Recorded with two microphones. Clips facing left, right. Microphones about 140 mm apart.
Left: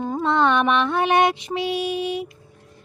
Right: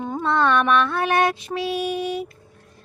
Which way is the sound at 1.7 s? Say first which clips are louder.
Right 1 dB; 40° right (ahead or behind).